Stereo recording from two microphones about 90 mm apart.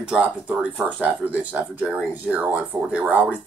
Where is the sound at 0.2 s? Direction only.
15° right (ahead or behind).